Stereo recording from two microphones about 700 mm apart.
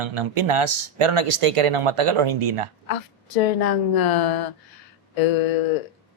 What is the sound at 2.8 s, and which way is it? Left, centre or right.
A woman's voice, left.